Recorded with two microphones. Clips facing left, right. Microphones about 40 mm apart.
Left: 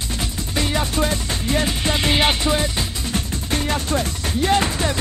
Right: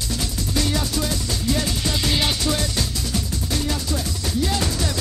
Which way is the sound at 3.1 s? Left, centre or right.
Left.